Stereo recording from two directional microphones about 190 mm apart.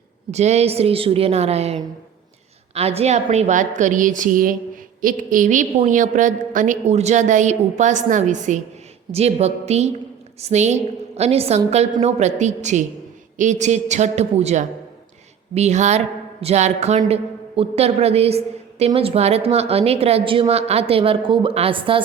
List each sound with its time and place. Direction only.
0.3 s a woman's voice: 35° right (ahead or behind)